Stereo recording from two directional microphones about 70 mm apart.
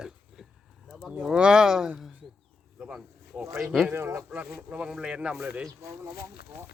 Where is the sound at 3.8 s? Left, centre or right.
Right.